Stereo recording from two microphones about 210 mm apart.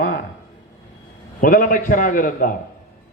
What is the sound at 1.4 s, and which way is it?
A man's voice, 40° left (ahead or behind).